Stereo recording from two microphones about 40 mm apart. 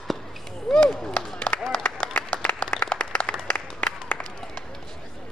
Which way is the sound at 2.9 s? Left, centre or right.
Left.